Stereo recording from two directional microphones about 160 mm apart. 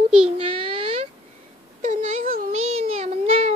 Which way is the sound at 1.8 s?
55° right (ahead or behind).